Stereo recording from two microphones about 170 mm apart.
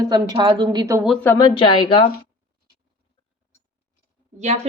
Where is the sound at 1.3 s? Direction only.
25° left (ahead or behind).